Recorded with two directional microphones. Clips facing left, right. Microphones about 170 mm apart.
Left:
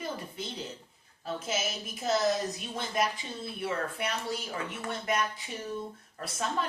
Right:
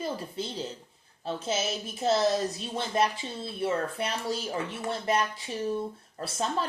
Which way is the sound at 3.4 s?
30° right (ahead or behind).